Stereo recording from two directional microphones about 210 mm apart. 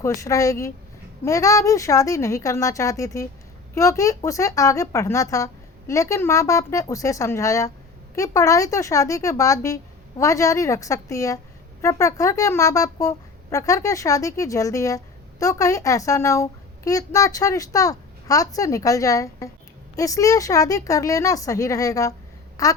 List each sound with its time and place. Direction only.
0.0 s speech: 15° left (ahead or behind)